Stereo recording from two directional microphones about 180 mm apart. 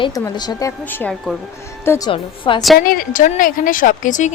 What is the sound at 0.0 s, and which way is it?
Speech, 20° left (ahead or behind).